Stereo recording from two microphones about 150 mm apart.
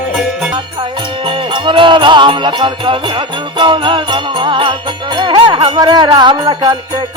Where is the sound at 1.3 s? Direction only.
35° right (ahead or behind).